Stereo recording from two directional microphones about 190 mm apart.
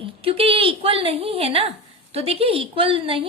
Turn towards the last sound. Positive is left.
turn(degrees=-30)  # may be behind; listen again after turning